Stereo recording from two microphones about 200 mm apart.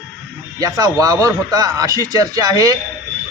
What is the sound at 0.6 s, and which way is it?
Speech, 20° right (ahead or behind).